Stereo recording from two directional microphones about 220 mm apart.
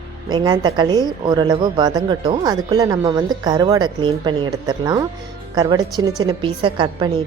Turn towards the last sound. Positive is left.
turn(degrees=-20)  # may be behind; listen again after turning